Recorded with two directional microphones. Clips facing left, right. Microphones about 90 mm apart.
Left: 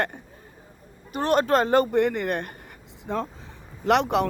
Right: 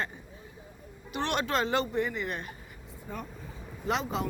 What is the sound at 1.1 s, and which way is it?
A woman's voice, 40° left (ahead or behind).